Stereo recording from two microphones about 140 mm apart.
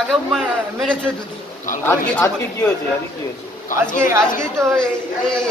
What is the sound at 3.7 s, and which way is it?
Speech, 70° left (ahead or behind).